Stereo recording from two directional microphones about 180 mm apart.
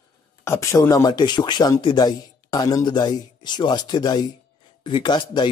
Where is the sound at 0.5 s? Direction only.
15° left (ahead or behind).